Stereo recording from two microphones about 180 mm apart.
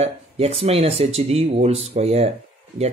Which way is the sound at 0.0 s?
35° right (ahead or behind).